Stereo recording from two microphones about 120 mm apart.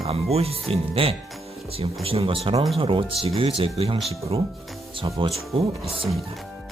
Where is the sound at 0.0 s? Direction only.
55° right (ahead or behind).